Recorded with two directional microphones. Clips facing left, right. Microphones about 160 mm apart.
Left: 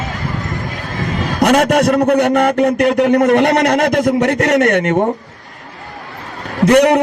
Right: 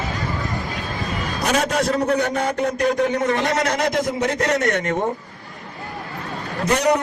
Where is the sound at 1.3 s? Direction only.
75° left (ahead or behind).